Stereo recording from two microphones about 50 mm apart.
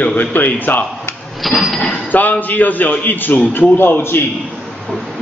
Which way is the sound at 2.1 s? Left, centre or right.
Left.